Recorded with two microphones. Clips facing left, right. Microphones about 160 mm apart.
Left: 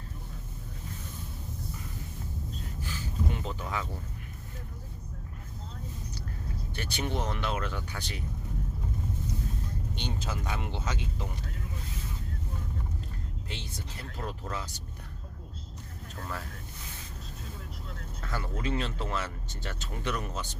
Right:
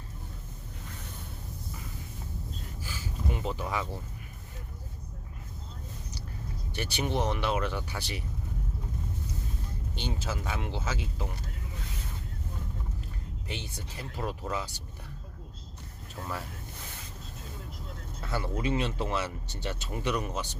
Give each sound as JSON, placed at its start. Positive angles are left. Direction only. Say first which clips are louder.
{"t": 2.8, "sound": "a sound", "louder": "left 2 dB", "side_deg": -5}
{"t": 6.7, "sound": "speech", "louder": "right 3 dB", "side_deg": -10}
{"t": 10.0, "sound": "speech", "louder": "right 3 dB", "side_deg": -5}
{"t": 14.2, "sound": "speech", "louder": "right 4 dB", "side_deg": -10}
{"t": 16.1, "sound": "speech", "louder": "right 2 dB", "side_deg": -15}
{"t": 18.2, "sound": "speech", "louder": "right 3 dB", "side_deg": -10}